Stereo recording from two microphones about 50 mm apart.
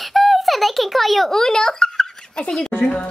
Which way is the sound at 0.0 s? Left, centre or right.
Centre.